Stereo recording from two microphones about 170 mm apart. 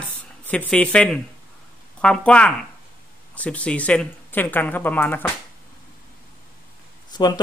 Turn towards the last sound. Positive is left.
turn(degrees=25)  # may be behind; listen again after turning